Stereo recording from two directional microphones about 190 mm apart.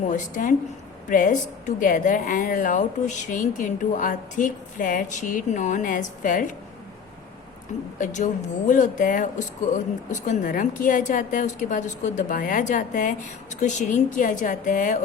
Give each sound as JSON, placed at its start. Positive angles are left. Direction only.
{"t": 0.1, "sound": "a woman's voice", "side_deg": 45}
{"t": 7.9, "sound": "a woman's voice", "side_deg": 40}